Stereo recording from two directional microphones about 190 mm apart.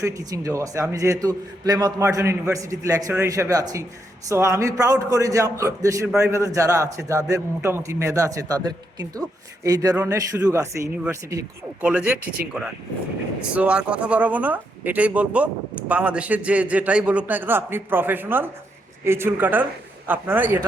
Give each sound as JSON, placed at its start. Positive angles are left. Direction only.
{"t": 0.0, "sound": "speech", "side_deg": -20}